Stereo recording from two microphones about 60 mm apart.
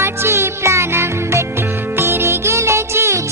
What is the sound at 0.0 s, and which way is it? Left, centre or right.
Music, right.